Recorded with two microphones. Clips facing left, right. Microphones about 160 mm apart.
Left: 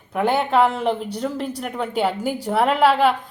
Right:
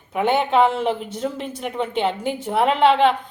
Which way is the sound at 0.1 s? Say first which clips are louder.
Even; centre (ahead or behind).